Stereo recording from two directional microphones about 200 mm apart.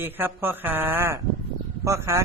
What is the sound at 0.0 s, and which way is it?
Speech, 10° right (ahead or behind).